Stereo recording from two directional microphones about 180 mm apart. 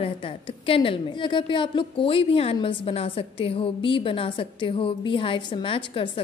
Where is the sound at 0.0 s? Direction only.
30° left (ahead or behind).